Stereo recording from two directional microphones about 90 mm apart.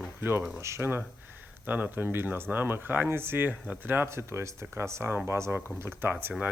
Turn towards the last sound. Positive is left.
turn(degrees=-25)  # may be behind; listen again after turning